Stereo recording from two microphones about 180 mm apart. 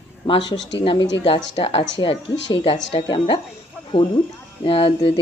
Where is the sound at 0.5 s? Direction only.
90° left.